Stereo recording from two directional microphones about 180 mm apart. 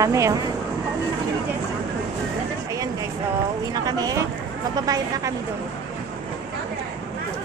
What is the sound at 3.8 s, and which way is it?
A woman's voice, 20° right (ahead or behind).